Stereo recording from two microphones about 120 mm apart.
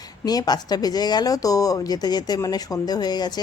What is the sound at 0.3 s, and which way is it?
A woman's voice, 35° left (ahead or behind).